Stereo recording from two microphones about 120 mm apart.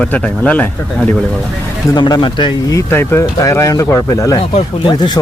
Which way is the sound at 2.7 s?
20° left (ahead or behind).